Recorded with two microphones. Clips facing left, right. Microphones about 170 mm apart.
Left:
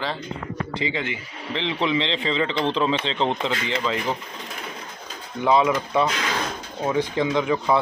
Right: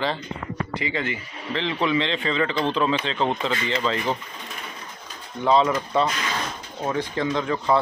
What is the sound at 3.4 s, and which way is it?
Speech, 15° left (ahead or behind).